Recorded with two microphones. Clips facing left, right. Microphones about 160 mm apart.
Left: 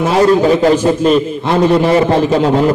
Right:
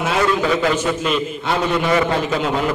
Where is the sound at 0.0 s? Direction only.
35° left (ahead or behind).